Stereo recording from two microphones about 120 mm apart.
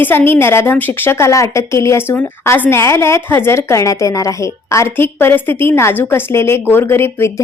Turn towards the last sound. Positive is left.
turn(degrees=20)  # may be behind; listen again after turning